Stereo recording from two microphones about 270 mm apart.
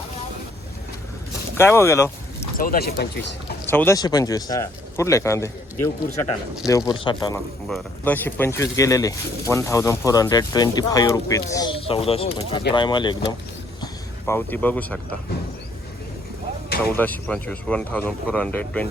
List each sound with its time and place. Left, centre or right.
1.5 s speech: centre
2.4 s speech: left
3.7 s speech: centre
17.0 s speech: centre